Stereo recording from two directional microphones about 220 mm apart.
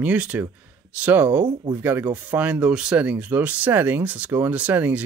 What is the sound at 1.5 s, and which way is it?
Speech, 20° right (ahead or behind).